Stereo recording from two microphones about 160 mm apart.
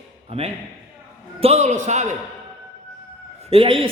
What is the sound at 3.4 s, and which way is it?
Speech, 35° right (ahead or behind).